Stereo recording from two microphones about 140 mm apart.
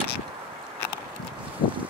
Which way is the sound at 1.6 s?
35° left (ahead or behind).